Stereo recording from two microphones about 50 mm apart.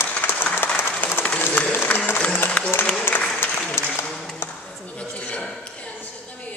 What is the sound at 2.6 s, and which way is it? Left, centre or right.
Applause, left.